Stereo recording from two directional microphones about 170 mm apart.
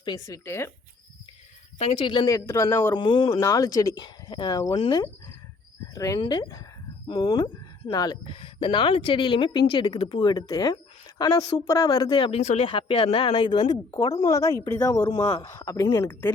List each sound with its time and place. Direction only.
0.0 s speech: 20° left (ahead or behind)
1.8 s speech: 35° left (ahead or behind); by 3.0 s 20° left (ahead or behind)
3.0 s speech: 30° left (ahead or behind); by 16.3 s 15° left (ahead or behind)